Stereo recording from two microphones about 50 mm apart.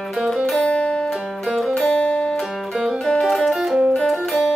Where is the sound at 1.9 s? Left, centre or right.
Left.